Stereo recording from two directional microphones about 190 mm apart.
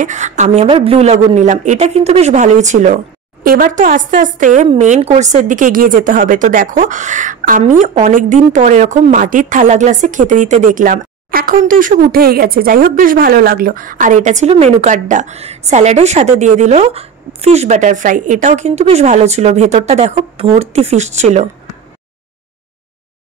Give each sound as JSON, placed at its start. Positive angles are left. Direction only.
{"t": 0.0, "sound": "a woman's voice", "side_deg": -40}